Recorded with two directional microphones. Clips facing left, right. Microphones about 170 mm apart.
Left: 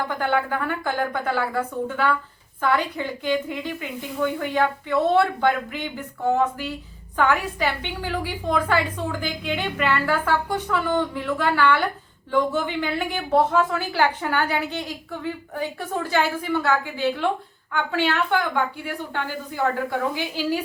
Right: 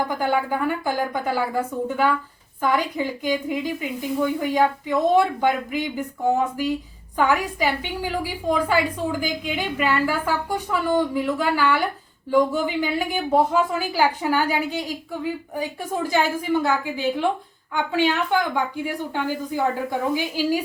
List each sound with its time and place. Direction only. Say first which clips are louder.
0.1 s a woman's voice: right 1 dB; 10° right (ahead or behind)